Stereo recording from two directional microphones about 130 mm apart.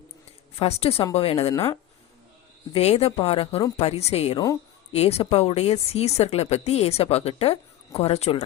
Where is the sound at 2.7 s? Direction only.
50° left (ahead or behind).